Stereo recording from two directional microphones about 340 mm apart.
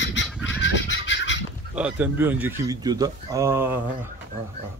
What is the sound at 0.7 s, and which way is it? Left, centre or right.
Goose, left.